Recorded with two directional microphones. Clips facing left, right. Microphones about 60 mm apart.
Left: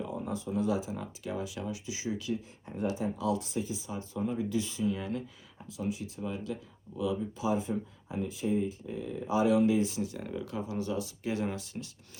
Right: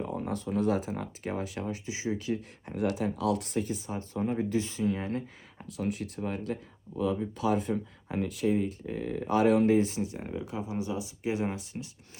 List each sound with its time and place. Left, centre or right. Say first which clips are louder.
0.0 s speech: right 2 dB; right
2.6 s speech: right 3 dB; right
5.7 s speech: right 2 dB; right
9.5 s speech: right 2 dB; right